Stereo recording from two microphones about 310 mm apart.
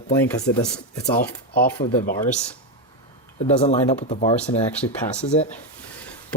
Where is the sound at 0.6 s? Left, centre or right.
Left.